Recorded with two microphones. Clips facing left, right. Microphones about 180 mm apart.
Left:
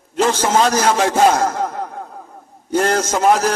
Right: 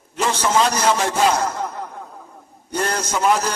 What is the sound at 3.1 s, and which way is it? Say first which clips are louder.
Speech: left 1 dB; 45° left (ahead or behind).